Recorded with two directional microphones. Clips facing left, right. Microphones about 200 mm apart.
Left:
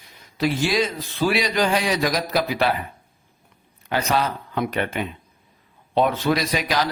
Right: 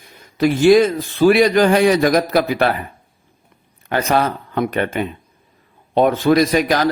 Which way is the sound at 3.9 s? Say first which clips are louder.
Right 5 dB; 55° right (ahead or behind).